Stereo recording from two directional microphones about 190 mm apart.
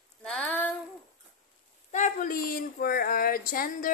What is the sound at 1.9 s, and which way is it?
A woman's voice, 40° left (ahead or behind).